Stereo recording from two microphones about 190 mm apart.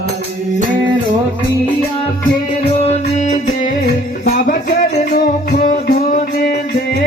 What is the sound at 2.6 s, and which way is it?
Music, 30° left (ahead or behind).